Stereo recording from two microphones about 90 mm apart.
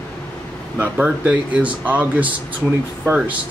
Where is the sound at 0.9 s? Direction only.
10° right (ahead or behind).